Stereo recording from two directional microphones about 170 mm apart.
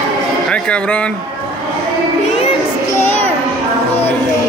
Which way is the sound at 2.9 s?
10° left (ahead or behind).